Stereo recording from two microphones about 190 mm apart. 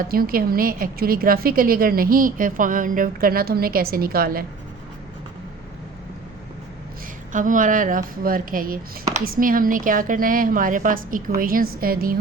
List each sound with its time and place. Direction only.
0.0 s a woman's voice: 50° right (ahead or behind)
7.3 s a woman's voice: 45° right (ahead or behind)